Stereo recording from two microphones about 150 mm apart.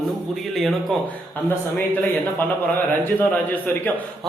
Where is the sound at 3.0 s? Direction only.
10° left (ahead or behind).